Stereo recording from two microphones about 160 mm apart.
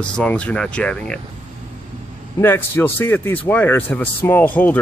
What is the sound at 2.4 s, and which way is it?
Speech, 15° left (ahead or behind).